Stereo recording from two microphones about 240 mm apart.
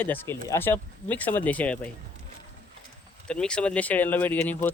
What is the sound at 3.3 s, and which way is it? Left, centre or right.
Speech, centre.